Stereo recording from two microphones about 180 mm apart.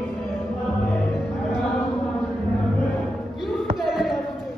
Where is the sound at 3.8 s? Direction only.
Centre (ahead or behind).